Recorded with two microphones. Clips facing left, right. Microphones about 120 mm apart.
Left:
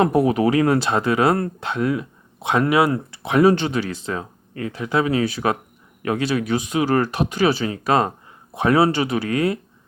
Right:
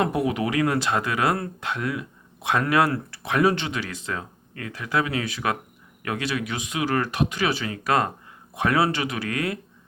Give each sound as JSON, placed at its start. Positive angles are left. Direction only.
{"t": 0.0, "sound": "speech", "side_deg": 40}
{"t": 3.4, "sound": "speech", "side_deg": 40}